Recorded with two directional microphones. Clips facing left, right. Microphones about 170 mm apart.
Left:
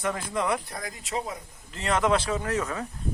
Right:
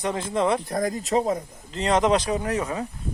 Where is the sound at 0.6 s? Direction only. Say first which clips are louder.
Right 12 dB; 45° right (ahead or behind).